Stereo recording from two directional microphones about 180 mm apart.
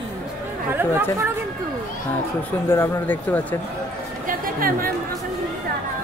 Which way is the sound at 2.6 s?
10° left (ahead or behind).